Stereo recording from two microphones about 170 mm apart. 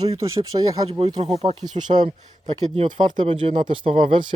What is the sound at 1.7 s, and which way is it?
Speech, 25° right (ahead or behind).